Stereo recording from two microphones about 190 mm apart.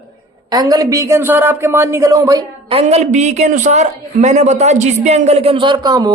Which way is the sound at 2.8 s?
35° right (ahead or behind).